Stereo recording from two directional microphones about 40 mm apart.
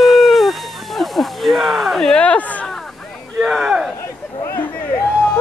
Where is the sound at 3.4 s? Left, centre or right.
Centre.